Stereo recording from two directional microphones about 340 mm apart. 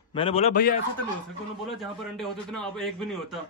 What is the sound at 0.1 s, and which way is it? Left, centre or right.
Speech, centre.